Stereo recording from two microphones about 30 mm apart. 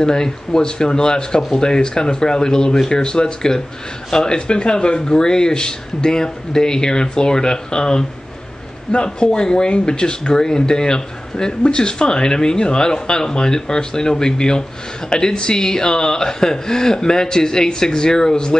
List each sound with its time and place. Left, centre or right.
0.0 s speech: left
8.9 s a man's voice: left